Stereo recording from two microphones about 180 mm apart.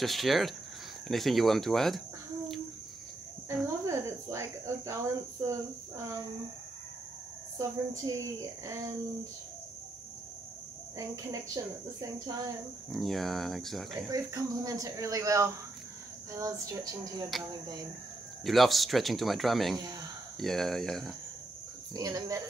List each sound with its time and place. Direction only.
0.0 s speech: centre (ahead or behind)
3.6 s speech: 15° right (ahead or behind)
7.5 s a woman's voice: 20° right (ahead or behind)
11.0 s speech: 20° right (ahead or behind)
12.9 s speech: centre (ahead or behind)
14.1 s speech: 20° right (ahead or behind)
18.4 s speech: centre (ahead or behind)
21.9 s speech: 20° right (ahead or behind)